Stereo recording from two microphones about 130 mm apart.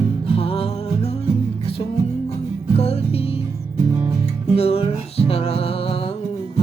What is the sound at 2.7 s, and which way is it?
Music, 50° left (ahead or behind).